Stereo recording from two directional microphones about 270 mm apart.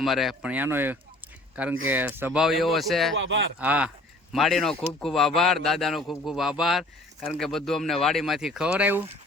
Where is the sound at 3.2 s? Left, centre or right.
Right.